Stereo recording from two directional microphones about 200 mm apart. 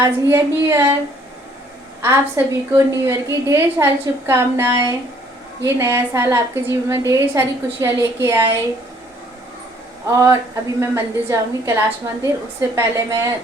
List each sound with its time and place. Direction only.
0.0 s a woman's voice: 15° right (ahead or behind)
2.0 s a woman's voice: 15° right (ahead or behind)
10.1 s a woman's voice: 15° right (ahead or behind)